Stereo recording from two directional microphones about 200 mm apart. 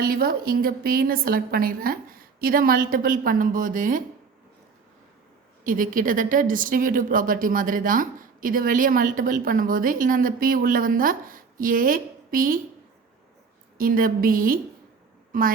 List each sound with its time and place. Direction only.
0.0 s a woman's voice: 50° right (ahead or behind)
5.6 s a woman's voice: 45° right (ahead or behind)
13.7 s a woman's voice: 45° right (ahead or behind)